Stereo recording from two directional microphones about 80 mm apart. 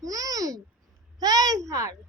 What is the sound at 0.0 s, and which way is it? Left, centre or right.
Babbling, right.